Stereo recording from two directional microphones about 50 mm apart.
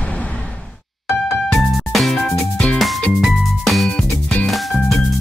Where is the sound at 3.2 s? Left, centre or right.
Centre.